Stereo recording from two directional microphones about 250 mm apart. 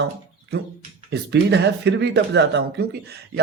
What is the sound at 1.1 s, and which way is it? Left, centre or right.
A man's voice, right.